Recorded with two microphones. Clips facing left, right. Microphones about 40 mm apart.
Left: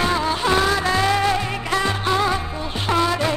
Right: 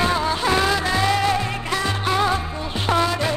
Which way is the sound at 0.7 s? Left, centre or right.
Left.